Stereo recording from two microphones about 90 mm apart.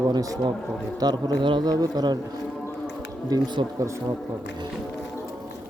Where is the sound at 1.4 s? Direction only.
65° right (ahead or behind).